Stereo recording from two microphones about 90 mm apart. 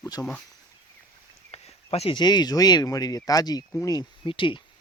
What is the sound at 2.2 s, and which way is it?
Speech, 50° left (ahead or behind).